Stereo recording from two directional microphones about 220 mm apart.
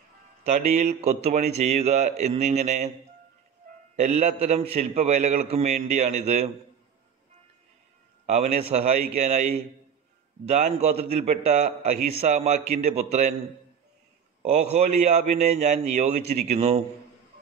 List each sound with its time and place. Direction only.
0.4 s a man's voice: 30° right (ahead or behind)
3.9 s a man's voice: 30° right (ahead or behind)
8.3 s a man's voice: 30° right (ahead or behind)
14.4 s a man's voice: 30° right (ahead or behind)